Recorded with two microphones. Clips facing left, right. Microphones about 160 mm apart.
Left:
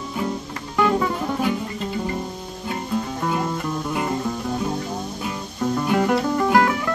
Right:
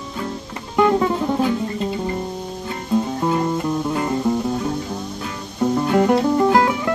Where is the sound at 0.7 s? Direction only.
25° right (ahead or behind).